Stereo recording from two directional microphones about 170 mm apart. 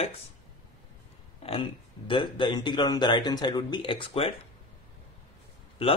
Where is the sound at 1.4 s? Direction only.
35° left (ahead or behind).